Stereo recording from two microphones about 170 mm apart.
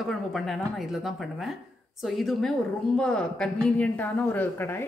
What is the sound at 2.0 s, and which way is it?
A woman's voice, centre (ahead or behind).